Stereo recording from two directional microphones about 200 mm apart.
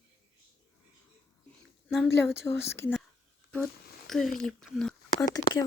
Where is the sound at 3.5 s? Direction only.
Centre (ahead or behind).